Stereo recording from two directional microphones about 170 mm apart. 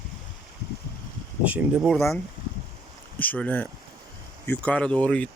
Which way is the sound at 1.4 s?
10° right (ahead or behind).